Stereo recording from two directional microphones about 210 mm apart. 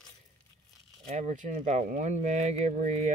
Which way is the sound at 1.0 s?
30° right (ahead or behind).